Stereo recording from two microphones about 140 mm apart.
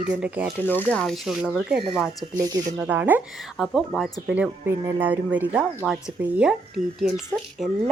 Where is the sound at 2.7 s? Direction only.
10° right (ahead or behind).